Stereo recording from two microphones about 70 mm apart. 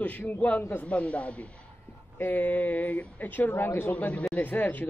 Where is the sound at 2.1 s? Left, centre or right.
Left.